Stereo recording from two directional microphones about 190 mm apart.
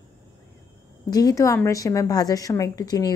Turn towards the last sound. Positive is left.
turn(degrees=20)  # may be behind; listen again after turning